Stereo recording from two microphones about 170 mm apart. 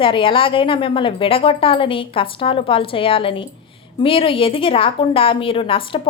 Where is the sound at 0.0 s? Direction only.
30° left (ahead or behind).